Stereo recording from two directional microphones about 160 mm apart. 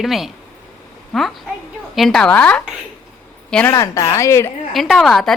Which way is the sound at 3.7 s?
20° left (ahead or behind).